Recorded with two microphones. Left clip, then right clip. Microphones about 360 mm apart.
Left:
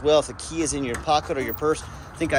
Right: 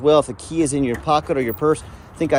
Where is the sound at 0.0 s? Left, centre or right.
Centre.